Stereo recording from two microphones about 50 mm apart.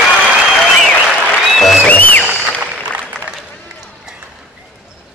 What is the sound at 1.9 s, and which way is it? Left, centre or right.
Music, left.